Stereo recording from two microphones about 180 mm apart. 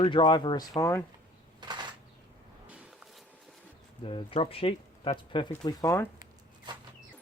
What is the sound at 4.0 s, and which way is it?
Speech, 30° left (ahead or behind).